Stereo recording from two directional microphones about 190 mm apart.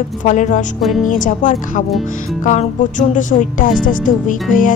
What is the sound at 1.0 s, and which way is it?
Speech, 45° left (ahead or behind).